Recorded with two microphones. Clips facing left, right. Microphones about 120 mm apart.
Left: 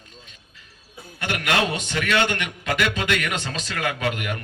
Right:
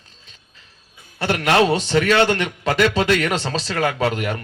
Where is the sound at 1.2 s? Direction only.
35° right (ahead or behind).